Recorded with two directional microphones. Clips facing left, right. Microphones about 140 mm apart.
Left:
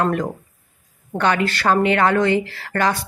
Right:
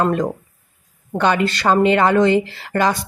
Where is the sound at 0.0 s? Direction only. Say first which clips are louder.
Right 2 dB; 20° right (ahead or behind).